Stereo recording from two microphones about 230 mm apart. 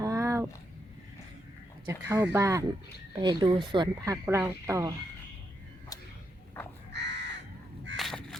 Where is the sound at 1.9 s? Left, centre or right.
Centre.